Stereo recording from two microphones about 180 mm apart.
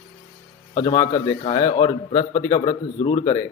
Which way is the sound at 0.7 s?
25° left (ahead or behind).